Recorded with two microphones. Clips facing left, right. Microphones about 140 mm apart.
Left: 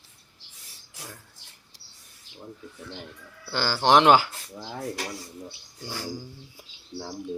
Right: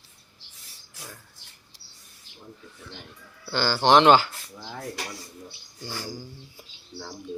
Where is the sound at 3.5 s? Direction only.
5° left (ahead or behind).